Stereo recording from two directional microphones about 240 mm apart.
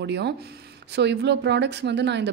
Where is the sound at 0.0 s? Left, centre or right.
Right.